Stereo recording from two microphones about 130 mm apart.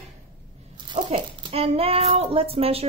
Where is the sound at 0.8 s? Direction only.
35° right (ahead or behind).